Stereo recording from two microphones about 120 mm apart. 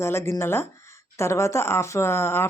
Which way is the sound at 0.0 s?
20° left (ahead or behind).